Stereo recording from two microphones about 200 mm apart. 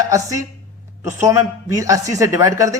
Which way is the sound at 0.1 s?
15° right (ahead or behind).